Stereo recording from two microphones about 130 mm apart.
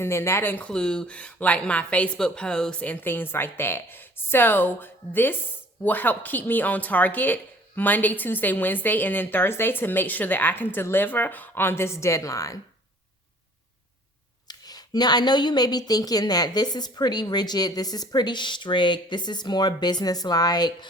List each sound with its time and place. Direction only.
0.0 s speech: 20° left (ahead or behind)
14.4 s a woman's voice: 30° left (ahead or behind)